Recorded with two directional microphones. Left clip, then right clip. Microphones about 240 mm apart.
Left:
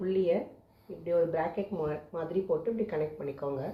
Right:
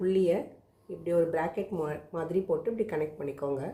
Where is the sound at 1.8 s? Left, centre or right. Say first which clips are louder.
Even; right.